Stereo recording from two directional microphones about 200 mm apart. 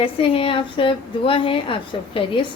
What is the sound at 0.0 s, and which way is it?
A woman's voice, 25° left (ahead or behind).